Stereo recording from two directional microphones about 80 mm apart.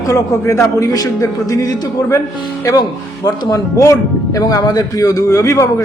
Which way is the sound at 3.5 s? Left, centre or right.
Left.